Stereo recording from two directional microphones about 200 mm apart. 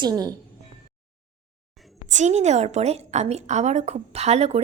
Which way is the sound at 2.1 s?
35° right (ahead or behind).